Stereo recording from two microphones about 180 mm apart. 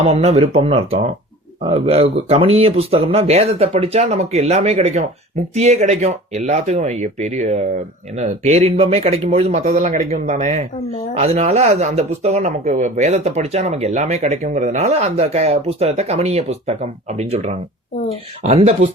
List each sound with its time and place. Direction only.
0.0 s speech: 35° right (ahead or behind)